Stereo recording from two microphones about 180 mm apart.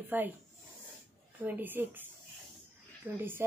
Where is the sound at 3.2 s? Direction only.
10° right (ahead or behind).